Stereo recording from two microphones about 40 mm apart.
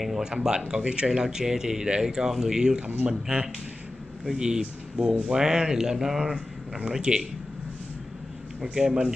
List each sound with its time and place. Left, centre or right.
0.2 s speech: centre
8.7 s speech: centre